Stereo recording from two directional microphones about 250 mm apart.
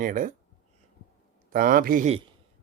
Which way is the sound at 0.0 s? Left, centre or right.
Right.